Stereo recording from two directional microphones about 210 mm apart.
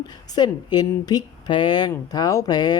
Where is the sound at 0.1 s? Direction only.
20° left (ahead or behind).